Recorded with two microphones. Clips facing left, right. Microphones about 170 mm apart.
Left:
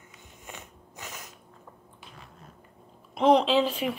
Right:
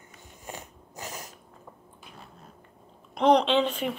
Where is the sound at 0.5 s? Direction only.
35° right (ahead or behind).